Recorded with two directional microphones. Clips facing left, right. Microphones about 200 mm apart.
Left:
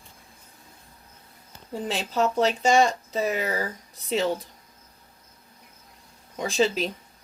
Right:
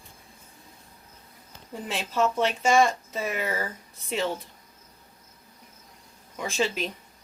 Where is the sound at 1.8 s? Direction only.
35° left (ahead or behind).